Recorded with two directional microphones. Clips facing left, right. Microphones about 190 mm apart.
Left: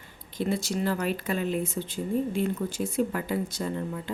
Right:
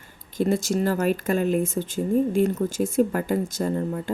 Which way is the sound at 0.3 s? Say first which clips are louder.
Right 6 dB; 45° right (ahead or behind).